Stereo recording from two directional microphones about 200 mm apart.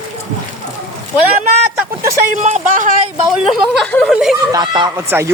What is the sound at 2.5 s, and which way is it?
Speech, 40° right (ahead or behind).